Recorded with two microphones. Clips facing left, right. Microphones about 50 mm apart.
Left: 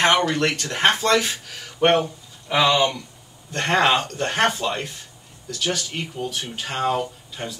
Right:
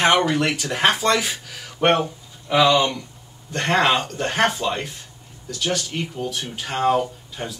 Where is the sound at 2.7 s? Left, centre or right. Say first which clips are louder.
Right 1 dB; centre.